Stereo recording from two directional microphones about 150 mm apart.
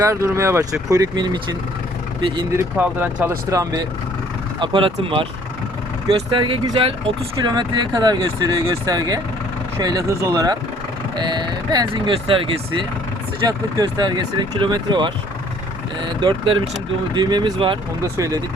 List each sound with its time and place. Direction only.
0.0 s speech: 20° right (ahead or behind)
2.5 s speech: 15° right (ahead or behind)
4.6 s speech: 35° right (ahead or behind)
13.5 s speech: 25° right (ahead or behind)
18.0 s speech: 25° right (ahead or behind)